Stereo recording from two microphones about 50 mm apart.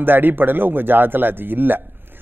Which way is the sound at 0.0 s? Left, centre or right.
Right.